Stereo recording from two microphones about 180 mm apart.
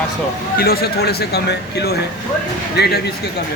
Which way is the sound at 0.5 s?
60° left (ahead or behind).